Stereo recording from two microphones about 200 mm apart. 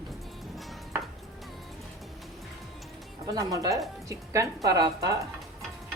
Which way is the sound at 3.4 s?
15° right (ahead or behind).